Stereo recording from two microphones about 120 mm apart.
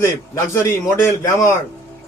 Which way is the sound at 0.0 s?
25° left (ahead or behind).